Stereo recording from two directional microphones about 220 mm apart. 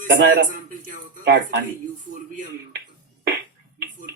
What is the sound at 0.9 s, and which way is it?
Speech, 35° right (ahead or behind).